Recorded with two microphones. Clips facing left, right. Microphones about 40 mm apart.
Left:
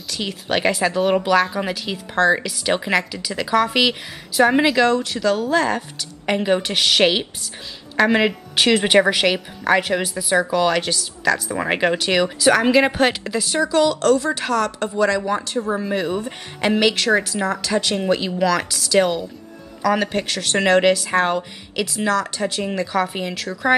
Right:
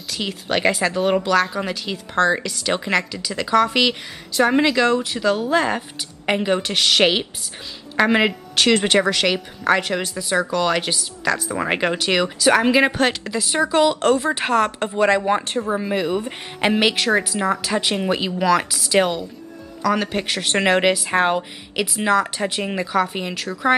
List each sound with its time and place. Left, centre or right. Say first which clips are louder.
0.1 s speech: even; centre
4.9 s speech: even; centre
6.4 s speech: left 2 dB; centre
8.5 s speech: left 2 dB; centre
13.7 s a woman's voice: even; right
15.7 s speech: right 1 dB; centre
19.8 s speech: left 1 dB; centre
20.2 s speech: even; centre
22.9 s speech: right 3 dB; centre